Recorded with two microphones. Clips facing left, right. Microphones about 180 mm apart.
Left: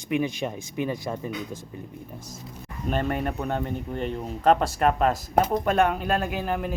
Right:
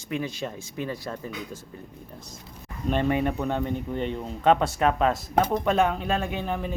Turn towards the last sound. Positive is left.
turn(degrees=5)  # may be behind; listen again after turning